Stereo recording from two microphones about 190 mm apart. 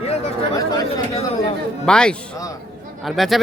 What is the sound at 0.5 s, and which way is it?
Chatter, 20° left (ahead or behind).